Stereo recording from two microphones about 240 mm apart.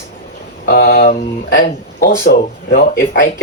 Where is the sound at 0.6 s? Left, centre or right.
Left.